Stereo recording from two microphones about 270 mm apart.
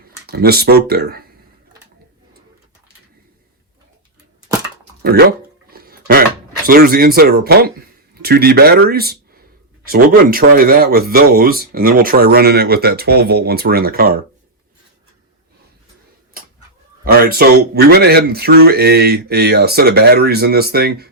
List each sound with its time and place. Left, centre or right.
0.0 s speech: right
5.0 s speech: right
5.7 s a sound: right
6.7 s speech: right
17.1 s speech: right